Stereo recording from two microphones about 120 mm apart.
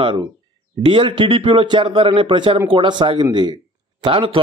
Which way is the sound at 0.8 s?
45° right (ahead or behind).